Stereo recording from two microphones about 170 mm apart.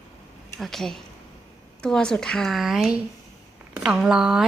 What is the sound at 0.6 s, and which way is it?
Speech, centre (ahead or behind).